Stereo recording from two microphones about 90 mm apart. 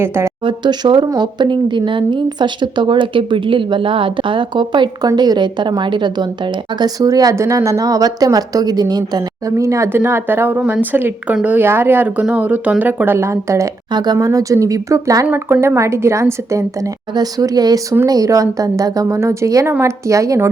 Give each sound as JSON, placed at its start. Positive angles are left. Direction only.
{"t": 0.0, "sound": "speech", "side_deg": -25}
{"t": 0.4, "sound": "a woman's voice", "side_deg": -55}
{"t": 9.6, "sound": "speech", "side_deg": -35}
{"t": 13.9, "sound": "a woman's voice", "side_deg": -50}
{"t": 15.3, "sound": "speech", "side_deg": -20}
{"t": 15.6, "sound": "a woman's voice", "side_deg": -30}
{"t": 17.2, "sound": "a woman's voice", "side_deg": -45}